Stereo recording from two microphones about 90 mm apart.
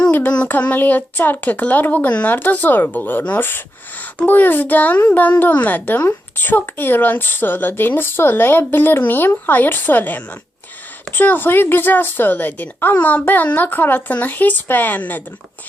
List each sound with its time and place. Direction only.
0.1 s speech: 15° left (ahead or behind)